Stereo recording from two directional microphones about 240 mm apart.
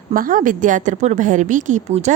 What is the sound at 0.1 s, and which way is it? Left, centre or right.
A woman's voice, right.